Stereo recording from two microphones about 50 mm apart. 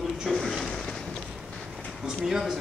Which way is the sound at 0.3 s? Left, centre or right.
Centre.